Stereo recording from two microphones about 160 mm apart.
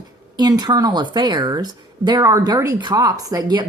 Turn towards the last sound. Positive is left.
turn(degrees=-25)  # may be behind; listen again after turning